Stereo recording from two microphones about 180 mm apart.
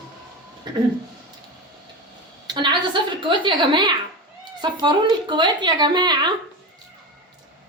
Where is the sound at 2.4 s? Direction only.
25° right (ahead or behind).